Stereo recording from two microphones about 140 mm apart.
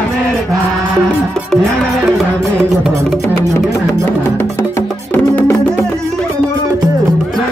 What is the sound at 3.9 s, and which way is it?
Music, 15° left (ahead or behind).